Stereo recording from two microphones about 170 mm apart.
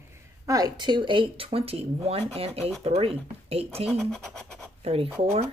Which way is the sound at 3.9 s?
Centre (ahead or behind).